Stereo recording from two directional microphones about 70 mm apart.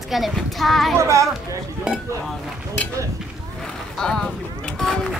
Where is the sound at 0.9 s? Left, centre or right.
Right.